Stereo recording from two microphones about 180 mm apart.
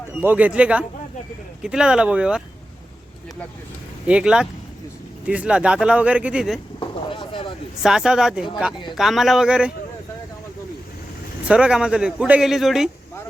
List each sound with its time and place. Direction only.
0.2 s speech: 10° right (ahead or behind)
4.0 s speech: 5° right (ahead or behind)
6.7 s a sound: 30° left (ahead or behind)
7.8 s speech: 5° right (ahead or behind)
11.4 s speech: 5° right (ahead or behind)